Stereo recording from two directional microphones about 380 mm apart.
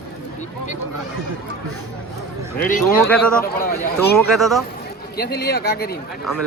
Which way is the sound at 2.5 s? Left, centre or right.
Left.